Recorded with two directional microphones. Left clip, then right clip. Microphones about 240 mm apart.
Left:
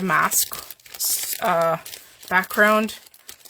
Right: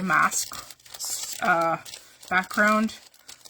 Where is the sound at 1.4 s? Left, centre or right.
Left.